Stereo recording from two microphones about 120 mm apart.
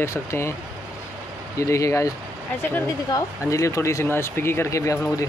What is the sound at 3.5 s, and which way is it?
Speech, 25° left (ahead or behind).